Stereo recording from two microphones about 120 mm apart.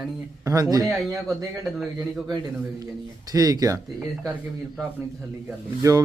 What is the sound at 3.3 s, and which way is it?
Speech, 30° right (ahead or behind).